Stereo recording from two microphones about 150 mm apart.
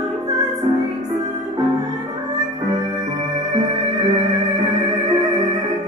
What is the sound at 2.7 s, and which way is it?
Music, 25° right (ahead or behind).